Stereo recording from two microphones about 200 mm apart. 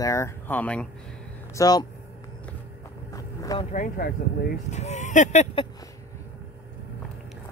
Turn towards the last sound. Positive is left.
turn(degrees=35)  # may be behind; listen again after turning